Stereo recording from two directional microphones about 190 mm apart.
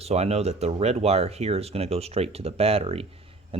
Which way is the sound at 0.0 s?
35° right (ahead or behind).